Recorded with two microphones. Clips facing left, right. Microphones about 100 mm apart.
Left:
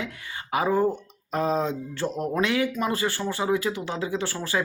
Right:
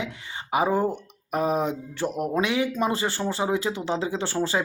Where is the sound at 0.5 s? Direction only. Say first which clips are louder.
Even; 20° right (ahead or behind).